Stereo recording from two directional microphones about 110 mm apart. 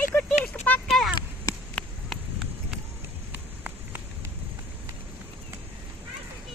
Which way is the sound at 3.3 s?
15° right (ahead or behind).